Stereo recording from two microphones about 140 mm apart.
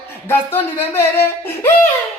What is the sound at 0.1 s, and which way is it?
Speech, 15° left (ahead or behind).